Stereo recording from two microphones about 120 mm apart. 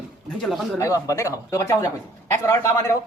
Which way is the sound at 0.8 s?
25° left (ahead or behind).